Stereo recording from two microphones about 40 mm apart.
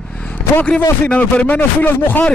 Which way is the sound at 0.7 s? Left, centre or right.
Left.